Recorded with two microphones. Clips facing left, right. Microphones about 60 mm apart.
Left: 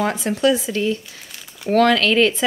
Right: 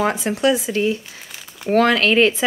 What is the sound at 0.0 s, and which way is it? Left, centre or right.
Speech, right.